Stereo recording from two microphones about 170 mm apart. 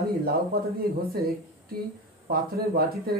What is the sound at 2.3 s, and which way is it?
Speech, 60° right (ahead or behind).